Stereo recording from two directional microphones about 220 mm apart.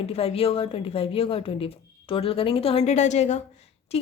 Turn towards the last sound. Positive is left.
turn(degrees=30)  # may be behind; listen again after turning